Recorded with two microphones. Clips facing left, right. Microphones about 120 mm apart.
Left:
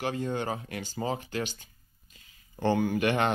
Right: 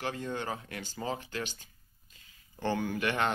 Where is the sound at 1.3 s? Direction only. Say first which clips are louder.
Left 5 dB; 15° left (ahead or behind).